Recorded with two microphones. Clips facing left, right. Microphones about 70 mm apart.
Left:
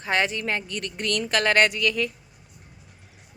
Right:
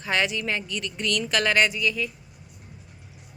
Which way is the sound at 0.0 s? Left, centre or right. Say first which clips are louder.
Left 1 dB; left.